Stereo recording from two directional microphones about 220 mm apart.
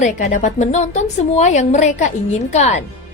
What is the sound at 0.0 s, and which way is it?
A woman's voice, 35° left (ahead or behind).